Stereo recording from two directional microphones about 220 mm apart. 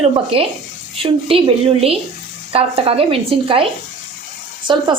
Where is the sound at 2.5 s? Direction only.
25° right (ahead or behind).